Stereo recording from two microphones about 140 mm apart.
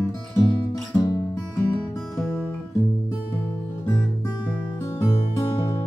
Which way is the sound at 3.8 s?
15° left (ahead or behind).